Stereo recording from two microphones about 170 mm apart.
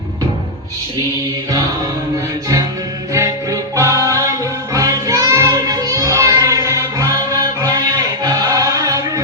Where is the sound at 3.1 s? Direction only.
20° right (ahead or behind).